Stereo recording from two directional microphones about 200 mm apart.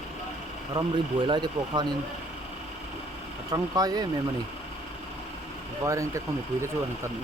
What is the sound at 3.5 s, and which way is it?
Speech, 20° right (ahead or behind).